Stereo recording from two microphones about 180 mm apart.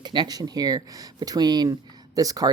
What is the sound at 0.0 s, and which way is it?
Speech, 25° right (ahead or behind).